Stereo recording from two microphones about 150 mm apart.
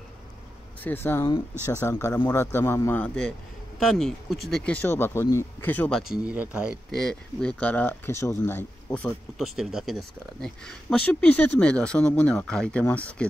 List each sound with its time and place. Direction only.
0.8 s speech: 15° left (ahead or behind)
6.1 s speech: 10° right (ahead or behind)
6.9 s speech: 5° left (ahead or behind)
9.6 s speech: 5° right (ahead or behind)